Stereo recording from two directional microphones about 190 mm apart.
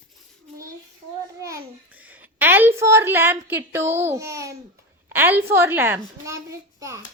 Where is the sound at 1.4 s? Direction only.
15° right (ahead or behind).